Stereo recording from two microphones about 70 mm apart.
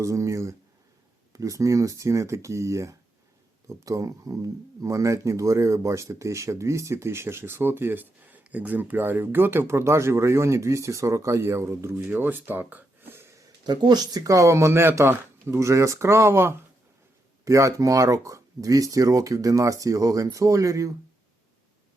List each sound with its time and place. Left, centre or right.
0.0 s speech: right
11.9 s speech: right
13.7 s speech: right
17.4 s speech: right